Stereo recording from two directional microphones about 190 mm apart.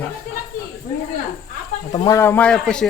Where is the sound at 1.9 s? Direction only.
20° left (ahead or behind); by 2.8 s 5° left (ahead or behind).